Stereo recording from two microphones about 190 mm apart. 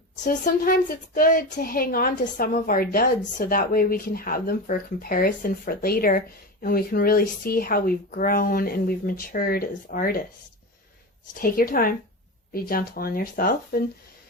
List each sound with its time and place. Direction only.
0.3 s a woman's voice: 50° left (ahead or behind)
11.3 s a woman's voice: 50° left (ahead or behind)